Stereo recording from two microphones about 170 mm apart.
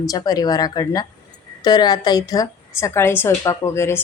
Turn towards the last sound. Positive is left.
turn(degrees=15)  # may be behind; listen again after turning